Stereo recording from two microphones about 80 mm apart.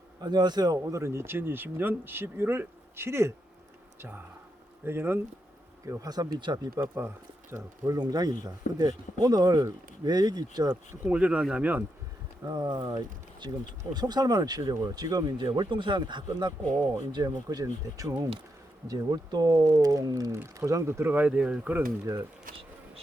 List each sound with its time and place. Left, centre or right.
0.2 s speech: right
4.9 s speech: right
5.8 s speech: right
6.8 s speech: right
7.9 s speech: right
11.0 s speech: centre
12.5 s speech: right
20.3 s speech: right
22.0 s speech: right